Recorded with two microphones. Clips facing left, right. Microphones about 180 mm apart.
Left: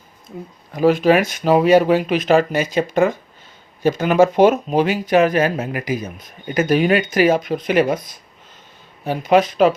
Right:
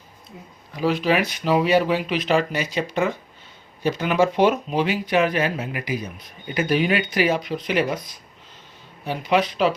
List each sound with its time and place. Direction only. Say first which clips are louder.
0.3 s speech: left 9 dB; 50° left (ahead or behind)